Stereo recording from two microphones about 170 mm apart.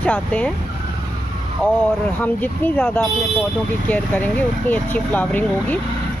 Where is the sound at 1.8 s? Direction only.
10° left (ahead or behind).